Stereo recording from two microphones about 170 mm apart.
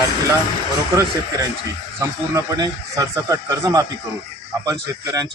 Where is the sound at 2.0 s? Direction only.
20° right (ahead or behind).